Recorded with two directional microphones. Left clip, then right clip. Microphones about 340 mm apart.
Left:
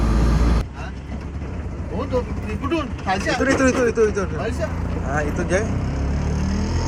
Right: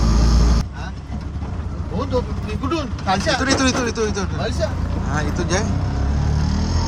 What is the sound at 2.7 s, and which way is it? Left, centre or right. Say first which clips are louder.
Vehicle: right 2 dB; right.